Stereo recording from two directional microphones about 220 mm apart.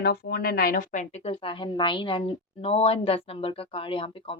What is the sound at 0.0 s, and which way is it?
Speech, 45° left (ahead or behind).